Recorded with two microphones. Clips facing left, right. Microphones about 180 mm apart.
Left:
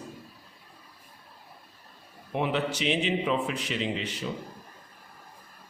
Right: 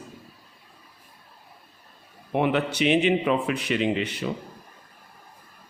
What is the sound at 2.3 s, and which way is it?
Speech, 60° right (ahead or behind).